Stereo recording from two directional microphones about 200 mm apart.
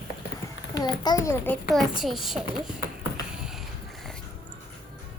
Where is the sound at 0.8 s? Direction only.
20° left (ahead or behind).